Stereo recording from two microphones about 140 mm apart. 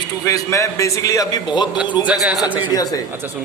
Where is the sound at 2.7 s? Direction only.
25° left (ahead or behind).